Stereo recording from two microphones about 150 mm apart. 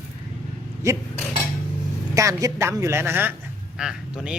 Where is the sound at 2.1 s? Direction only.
20° right (ahead or behind).